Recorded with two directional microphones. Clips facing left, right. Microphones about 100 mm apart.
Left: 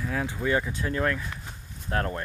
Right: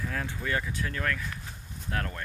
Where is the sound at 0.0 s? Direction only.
10° left (ahead or behind).